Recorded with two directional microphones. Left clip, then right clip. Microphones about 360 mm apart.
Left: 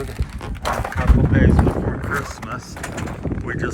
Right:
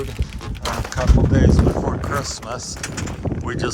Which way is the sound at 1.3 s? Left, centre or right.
Centre.